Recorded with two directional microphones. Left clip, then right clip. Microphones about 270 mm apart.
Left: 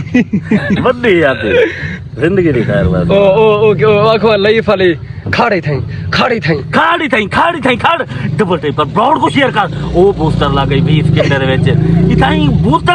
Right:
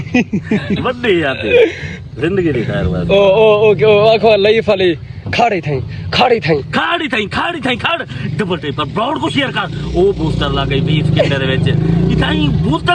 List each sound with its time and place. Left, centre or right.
0.1 s speech: centre